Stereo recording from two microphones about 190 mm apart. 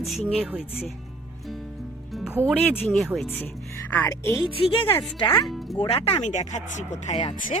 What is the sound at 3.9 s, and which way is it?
Speech, 10° left (ahead or behind).